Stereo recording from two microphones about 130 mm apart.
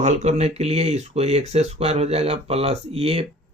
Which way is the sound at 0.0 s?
60° right (ahead or behind).